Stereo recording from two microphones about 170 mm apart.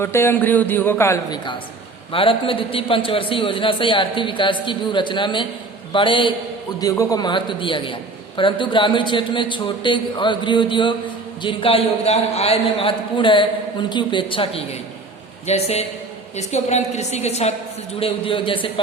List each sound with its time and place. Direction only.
0.0 s a man's voice: 15° left (ahead or behind)
2.1 s a man's voice: 30° left (ahead or behind)